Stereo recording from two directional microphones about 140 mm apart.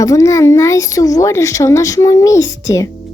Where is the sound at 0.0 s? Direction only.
20° left (ahead or behind).